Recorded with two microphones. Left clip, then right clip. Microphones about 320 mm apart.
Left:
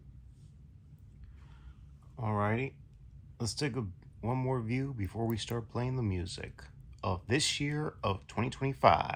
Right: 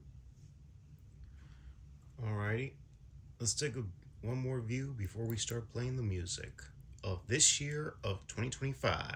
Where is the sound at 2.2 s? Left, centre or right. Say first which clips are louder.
Left 7 dB; centre.